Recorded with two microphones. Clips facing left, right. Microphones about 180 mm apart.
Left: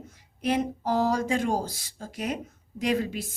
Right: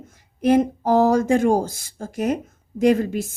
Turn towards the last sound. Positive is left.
turn(degrees=-50)  # may be behind; listen again after turning